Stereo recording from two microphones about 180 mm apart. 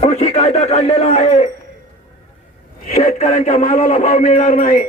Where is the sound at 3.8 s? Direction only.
35° left (ahead or behind).